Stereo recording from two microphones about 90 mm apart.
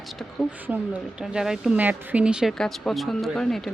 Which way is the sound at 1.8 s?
20° right (ahead or behind).